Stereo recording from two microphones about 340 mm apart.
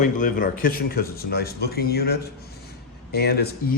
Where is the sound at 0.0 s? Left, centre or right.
Left.